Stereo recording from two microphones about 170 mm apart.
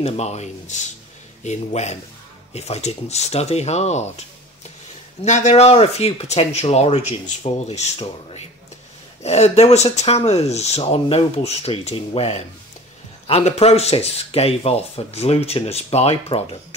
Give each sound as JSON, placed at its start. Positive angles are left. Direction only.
{"t": 0.0, "sound": "speech", "side_deg": 40}